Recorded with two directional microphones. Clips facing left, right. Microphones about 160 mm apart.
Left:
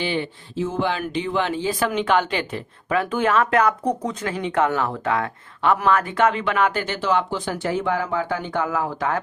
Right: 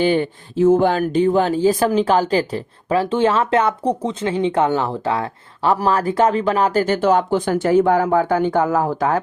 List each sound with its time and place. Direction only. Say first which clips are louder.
0.0 s speech: right 8 dB; 45° right (ahead or behind)